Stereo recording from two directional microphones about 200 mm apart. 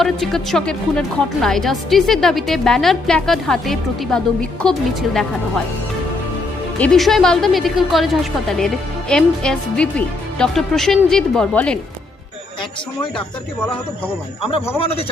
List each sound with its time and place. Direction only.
0.0 s a woman's voice: centre (ahead or behind)
6.7 s a woman's voice: 5° left (ahead or behind)
14.8 s a man's voice: 30° left (ahead or behind)